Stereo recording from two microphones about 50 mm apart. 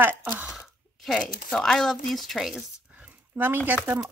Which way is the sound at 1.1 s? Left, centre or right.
Centre.